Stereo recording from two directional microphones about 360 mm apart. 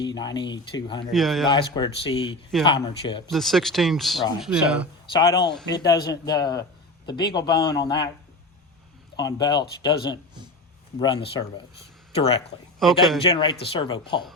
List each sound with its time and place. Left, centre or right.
0.2 s a man's voice: centre
1.1 s speech: centre
1.5 s a man's voice: centre
3.2 s speech: centre
5.1 s a man's voice: centre
9.1 s a man's voice: centre
12.8 s speech: centre
13.2 s a man's voice: centre